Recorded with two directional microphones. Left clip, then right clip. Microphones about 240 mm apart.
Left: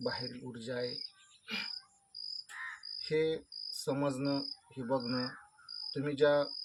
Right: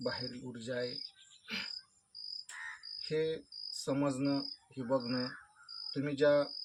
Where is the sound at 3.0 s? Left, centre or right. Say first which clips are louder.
Left 3 dB; centre.